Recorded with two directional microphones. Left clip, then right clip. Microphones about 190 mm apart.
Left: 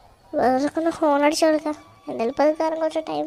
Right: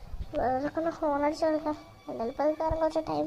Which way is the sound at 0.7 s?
50° left (ahead or behind).